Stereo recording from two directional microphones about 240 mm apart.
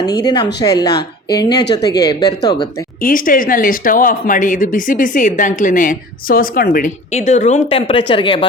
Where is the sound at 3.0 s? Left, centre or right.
Left.